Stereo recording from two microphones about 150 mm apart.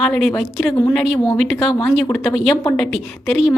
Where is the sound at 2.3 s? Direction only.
Centre (ahead or behind).